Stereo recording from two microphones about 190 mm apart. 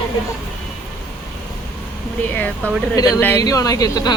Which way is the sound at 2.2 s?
10° left (ahead or behind).